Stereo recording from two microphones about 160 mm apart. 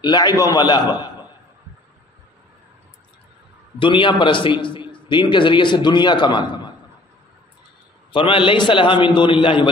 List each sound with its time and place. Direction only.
0.0 s a man's voice: 25° left (ahead or behind)
3.8 s a man's voice: 30° left (ahead or behind)
8.1 s a man's voice: 30° left (ahead or behind)